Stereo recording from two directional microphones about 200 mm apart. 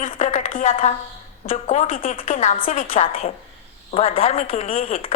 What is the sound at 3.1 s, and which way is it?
A woman's voice, 30° left (ahead or behind).